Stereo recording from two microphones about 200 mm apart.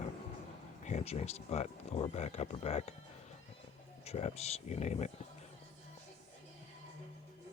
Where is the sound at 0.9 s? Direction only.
35° left (ahead or behind).